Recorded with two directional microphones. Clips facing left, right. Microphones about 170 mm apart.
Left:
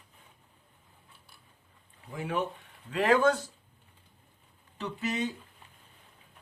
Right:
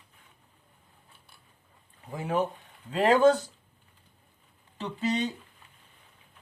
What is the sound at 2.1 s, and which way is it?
A man's voice, 35° right (ahead or behind).